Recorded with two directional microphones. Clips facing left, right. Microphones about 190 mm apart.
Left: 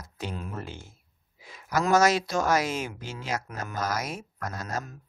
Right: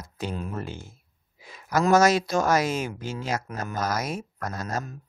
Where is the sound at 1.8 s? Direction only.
40° right (ahead or behind).